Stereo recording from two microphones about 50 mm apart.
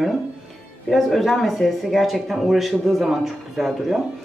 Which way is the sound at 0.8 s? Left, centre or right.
Centre.